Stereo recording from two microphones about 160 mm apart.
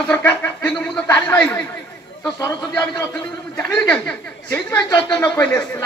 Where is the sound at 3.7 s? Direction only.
5° left (ahead or behind).